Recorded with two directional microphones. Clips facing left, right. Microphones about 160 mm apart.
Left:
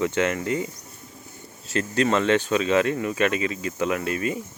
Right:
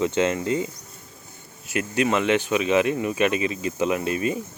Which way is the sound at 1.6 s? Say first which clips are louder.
Even; 10° right (ahead or behind).